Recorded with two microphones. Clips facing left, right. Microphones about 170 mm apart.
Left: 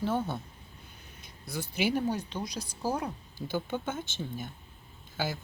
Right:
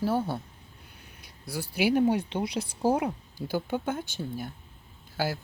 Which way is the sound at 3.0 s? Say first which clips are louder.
Right 5 dB; 10° right (ahead or behind).